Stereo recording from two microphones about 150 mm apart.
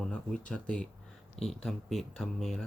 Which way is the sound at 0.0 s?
5° left (ahead or behind).